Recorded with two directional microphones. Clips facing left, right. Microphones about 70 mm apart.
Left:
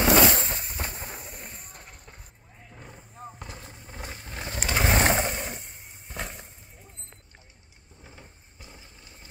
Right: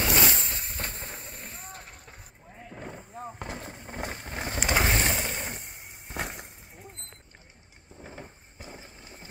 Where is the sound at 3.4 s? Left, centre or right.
Right.